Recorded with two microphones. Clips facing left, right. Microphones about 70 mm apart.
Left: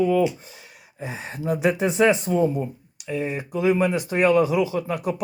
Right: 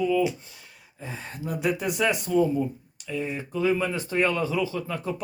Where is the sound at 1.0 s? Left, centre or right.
Centre.